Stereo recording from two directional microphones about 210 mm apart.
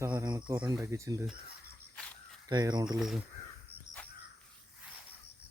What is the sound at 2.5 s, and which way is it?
Speech, 20° right (ahead or behind).